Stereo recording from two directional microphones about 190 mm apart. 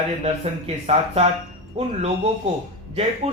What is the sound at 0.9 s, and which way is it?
Speech, 35° right (ahead or behind).